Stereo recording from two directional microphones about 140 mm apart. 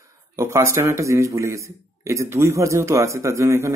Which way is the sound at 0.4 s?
20° right (ahead or behind).